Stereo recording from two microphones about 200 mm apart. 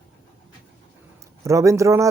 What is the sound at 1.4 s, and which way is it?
Speech, 15° right (ahead or behind).